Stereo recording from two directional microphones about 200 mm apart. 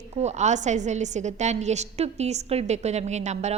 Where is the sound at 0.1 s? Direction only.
35° right (ahead or behind).